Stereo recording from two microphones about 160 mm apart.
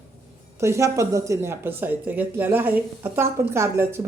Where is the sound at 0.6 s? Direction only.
20° right (ahead or behind).